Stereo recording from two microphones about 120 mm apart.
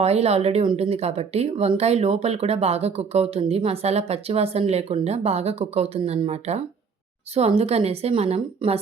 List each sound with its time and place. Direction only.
0.0 s speech: 60° right (ahead or behind)